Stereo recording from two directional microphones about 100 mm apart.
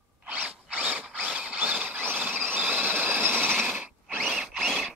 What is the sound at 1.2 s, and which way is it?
Vehicle, 10° right (ahead or behind).